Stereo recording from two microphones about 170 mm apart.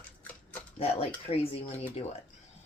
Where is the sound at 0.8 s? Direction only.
35° left (ahead or behind).